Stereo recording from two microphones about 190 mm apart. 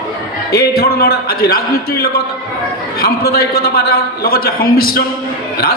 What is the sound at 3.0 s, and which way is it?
A man's voice, 55° left (ahead or behind).